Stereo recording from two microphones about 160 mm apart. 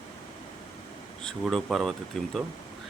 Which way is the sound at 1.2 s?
5° left (ahead or behind).